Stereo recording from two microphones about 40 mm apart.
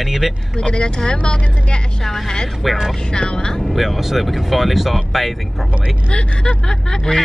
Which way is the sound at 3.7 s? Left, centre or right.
Centre.